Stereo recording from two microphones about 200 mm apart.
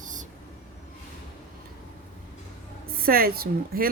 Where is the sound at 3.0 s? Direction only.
50° right (ahead or behind).